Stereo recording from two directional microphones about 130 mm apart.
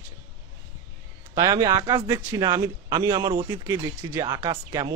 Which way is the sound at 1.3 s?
30° right (ahead or behind).